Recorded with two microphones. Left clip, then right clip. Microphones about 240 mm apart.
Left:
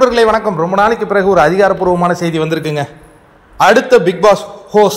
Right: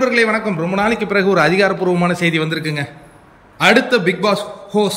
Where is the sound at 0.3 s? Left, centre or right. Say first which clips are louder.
Left 6 dB; centre.